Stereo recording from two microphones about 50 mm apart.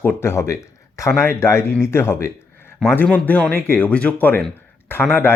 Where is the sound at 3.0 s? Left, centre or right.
Left.